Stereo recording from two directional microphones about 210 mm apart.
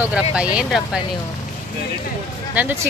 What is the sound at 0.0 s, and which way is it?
Speech, 5° right (ahead or behind).